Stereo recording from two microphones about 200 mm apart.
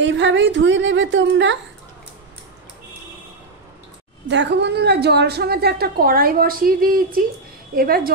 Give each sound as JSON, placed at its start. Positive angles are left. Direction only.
{"t": 0.0, "sound": "a woman's voice", "side_deg": -65}
{"t": 4.3, "sound": "a woman's voice", "side_deg": -60}